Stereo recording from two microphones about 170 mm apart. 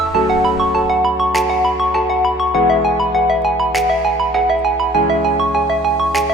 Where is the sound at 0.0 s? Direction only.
Centre (ahead or behind).